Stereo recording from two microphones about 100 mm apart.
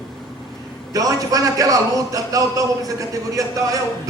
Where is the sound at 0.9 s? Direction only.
35° right (ahead or behind).